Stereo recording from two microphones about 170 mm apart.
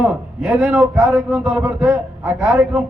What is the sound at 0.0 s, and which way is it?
A man's voice, 5° right (ahead or behind).